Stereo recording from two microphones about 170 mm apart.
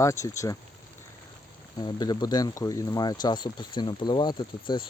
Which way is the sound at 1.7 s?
25° left (ahead or behind).